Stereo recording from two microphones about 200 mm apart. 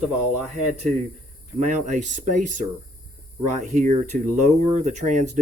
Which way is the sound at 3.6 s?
35° right (ahead or behind).